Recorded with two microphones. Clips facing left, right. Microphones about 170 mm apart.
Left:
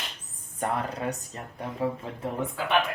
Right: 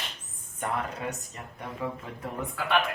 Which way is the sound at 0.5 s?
35° left (ahead or behind).